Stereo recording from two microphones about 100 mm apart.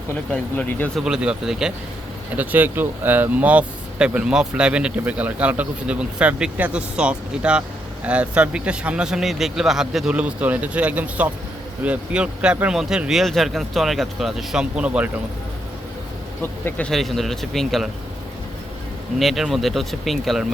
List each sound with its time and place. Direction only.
0.3 s speech: 15° left (ahead or behind)
0.9 s speech: 5° right (ahead or behind)
2.3 s speech: 15° right (ahead or behind)
16.4 s speech: 20° left (ahead or behind)
16.8 s speech: centre (ahead or behind)
19.2 s speech: centre (ahead or behind)